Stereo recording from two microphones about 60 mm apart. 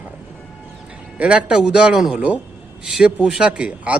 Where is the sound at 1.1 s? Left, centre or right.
Centre.